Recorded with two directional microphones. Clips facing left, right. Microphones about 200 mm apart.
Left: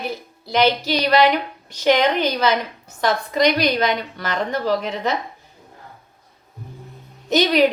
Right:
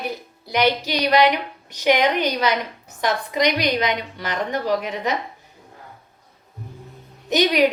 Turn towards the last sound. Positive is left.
turn(degrees=-15)  # may be behind; listen again after turning